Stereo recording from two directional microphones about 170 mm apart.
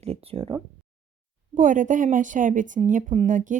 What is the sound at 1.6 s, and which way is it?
A woman's voice, 50° right (ahead or behind).